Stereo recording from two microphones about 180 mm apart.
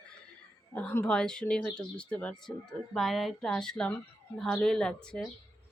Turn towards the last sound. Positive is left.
turn(degrees=5)  # may be behind; listen again after turning